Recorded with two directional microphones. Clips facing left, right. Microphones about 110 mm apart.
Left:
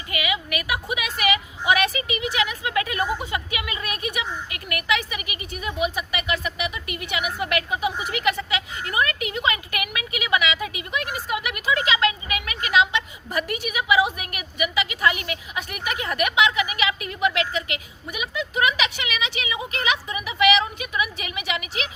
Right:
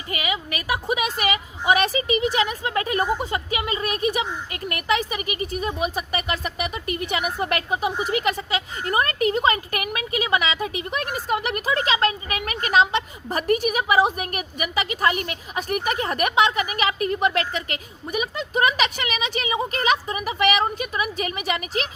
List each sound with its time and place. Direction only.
0.1 s a woman's voice: 35° right (ahead or behind)